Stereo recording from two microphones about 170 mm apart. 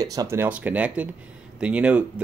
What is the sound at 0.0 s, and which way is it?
Speech, 20° right (ahead or behind).